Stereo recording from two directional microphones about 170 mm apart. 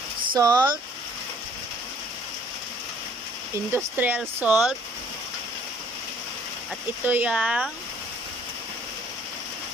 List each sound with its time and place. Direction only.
0.3 s speech: 20° right (ahead or behind)
3.5 s speech: 15° right (ahead or behind)
7.1 s speech: 10° right (ahead or behind)